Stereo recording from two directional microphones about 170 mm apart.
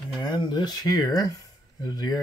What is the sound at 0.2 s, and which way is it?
Speech, 25° left (ahead or behind).